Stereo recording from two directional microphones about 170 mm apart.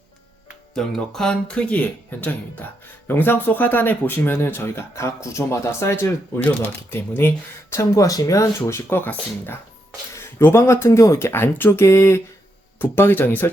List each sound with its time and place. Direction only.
0.7 s speech: 5° left (ahead or behind)